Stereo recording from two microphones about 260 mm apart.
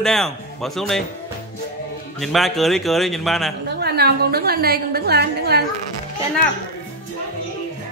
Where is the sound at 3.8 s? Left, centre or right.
Right.